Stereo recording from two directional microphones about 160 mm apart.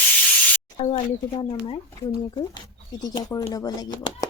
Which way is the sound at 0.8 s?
40° left (ahead or behind).